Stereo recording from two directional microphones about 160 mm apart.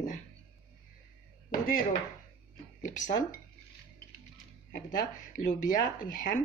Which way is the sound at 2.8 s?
50° left (ahead or behind).